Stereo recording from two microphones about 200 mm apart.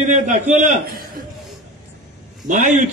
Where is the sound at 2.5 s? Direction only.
40° right (ahead or behind).